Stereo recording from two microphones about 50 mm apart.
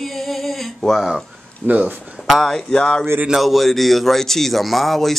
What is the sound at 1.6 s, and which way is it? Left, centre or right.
Speech, right.